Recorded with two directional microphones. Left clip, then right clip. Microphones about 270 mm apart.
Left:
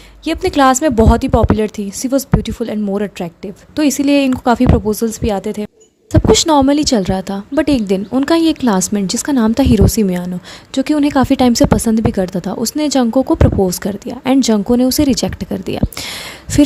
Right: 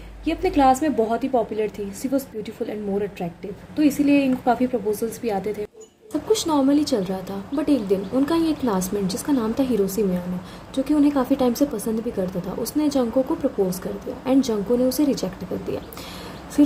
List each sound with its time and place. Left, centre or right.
0.3 s a woman's voice: left